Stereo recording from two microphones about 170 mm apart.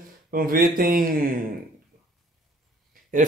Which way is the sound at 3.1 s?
50° right (ahead or behind).